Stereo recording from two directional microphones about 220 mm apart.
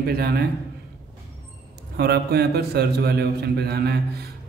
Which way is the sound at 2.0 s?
45° right (ahead or behind).